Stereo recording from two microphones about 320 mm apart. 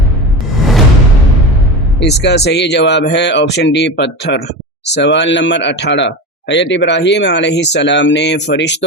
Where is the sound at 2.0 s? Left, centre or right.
Left.